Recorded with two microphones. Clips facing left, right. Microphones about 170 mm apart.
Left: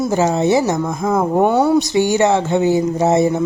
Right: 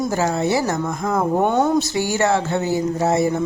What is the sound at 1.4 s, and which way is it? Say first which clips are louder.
Speech: left 4 dB; 10° left (ahead or behind).